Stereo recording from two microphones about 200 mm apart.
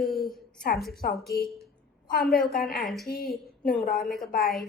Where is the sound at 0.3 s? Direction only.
Centre (ahead or behind).